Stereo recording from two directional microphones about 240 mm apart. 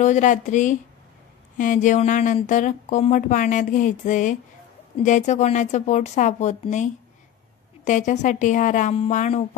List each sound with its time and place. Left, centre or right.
0.0 s a woman's voice: left